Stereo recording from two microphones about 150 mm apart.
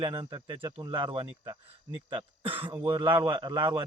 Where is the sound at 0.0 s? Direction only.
30° right (ahead or behind).